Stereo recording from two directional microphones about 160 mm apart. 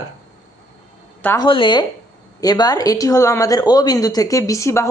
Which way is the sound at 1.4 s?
30° left (ahead or behind).